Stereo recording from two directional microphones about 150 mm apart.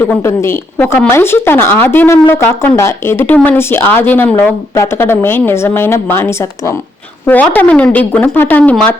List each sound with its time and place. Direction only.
0.0 s speech: 15° left (ahead or behind)